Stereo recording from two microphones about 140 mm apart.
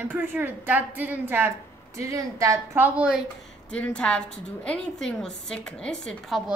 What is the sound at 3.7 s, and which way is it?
A woman's voice, 10° left (ahead or behind).